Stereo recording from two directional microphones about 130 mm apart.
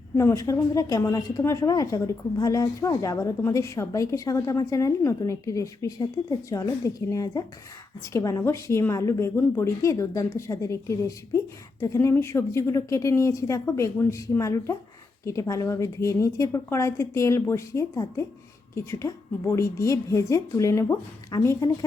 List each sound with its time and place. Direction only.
0.2 s a woman's voice: 20° left (ahead or behind)